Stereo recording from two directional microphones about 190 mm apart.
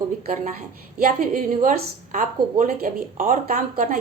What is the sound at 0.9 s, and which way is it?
Speech, 45° right (ahead or behind).